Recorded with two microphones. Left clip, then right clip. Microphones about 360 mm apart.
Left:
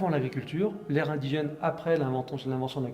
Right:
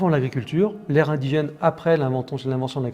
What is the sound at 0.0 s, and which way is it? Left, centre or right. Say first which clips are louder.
A man's voice: right 7 dB; right.